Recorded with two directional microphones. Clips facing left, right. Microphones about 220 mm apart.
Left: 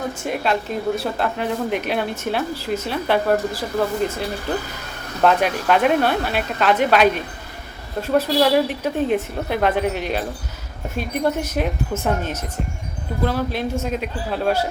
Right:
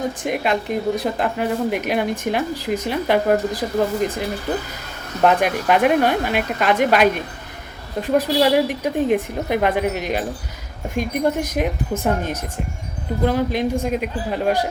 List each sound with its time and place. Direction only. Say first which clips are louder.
0.2 s speech: right 1 dB; 15° right (ahead or behind)
5.2 s speech: right 1 dB; 10° right (ahead or behind)